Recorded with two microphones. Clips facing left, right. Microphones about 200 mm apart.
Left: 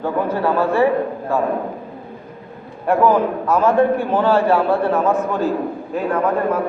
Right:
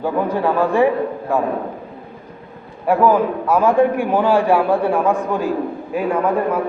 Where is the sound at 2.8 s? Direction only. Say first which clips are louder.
Right 1 dB; 5° right (ahead or behind).